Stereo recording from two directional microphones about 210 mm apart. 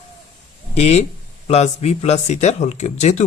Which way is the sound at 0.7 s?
30° left (ahead or behind).